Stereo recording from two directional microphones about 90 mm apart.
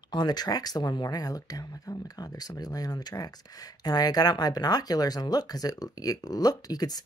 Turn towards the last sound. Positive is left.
turn(degrees=45)  # may be behind; listen again after turning